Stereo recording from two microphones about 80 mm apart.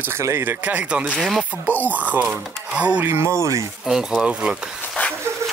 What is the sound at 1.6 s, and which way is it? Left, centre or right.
Speech, left.